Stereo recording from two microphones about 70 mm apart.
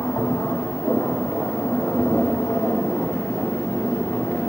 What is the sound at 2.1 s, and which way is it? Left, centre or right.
Vehicle, left.